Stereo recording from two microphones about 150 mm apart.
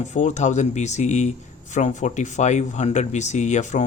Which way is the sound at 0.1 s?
50° left (ahead or behind).